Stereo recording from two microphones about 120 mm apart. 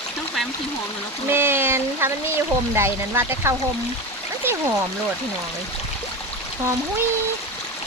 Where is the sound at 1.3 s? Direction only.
20° right (ahead or behind).